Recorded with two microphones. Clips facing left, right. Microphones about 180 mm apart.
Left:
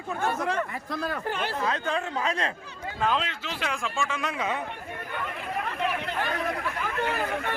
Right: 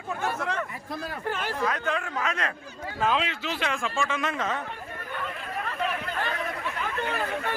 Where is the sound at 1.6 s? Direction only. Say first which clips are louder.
Right 1 dB; 25° left (ahead or behind).